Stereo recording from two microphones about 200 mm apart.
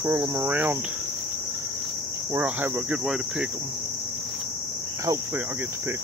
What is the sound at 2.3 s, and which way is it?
Cricket, 10° right (ahead or behind).